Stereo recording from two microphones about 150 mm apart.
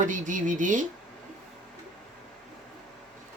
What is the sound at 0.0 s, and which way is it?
Speech, 60° right (ahead or behind).